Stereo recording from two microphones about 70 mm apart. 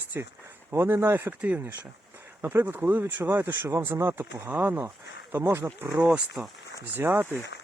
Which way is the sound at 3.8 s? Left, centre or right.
Right.